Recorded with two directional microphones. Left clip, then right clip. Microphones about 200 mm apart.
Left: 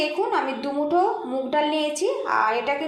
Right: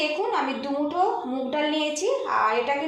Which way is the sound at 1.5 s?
40° left (ahead or behind).